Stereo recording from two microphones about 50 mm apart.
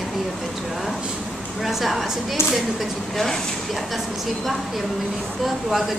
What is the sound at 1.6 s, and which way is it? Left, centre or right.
A woman's voice, centre.